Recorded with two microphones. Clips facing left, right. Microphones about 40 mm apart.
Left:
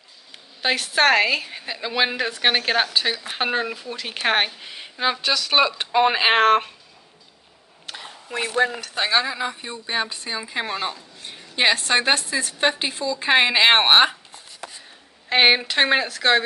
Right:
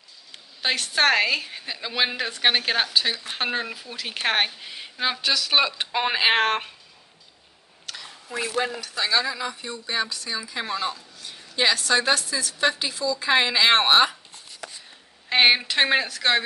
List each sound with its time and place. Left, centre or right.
0.6 s a woman's voice: centre
7.8 s a sound: centre
8.3 s a woman's voice: left
9.2 s a woman's voice: left
15.2 s a woman's voice: centre